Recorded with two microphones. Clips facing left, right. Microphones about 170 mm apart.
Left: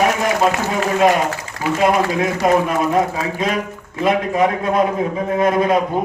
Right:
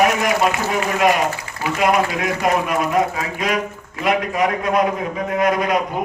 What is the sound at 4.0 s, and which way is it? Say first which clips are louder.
A man's voice: left 3 dB; 25° left (ahead or behind).